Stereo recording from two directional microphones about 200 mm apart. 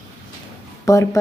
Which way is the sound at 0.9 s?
15° left (ahead or behind).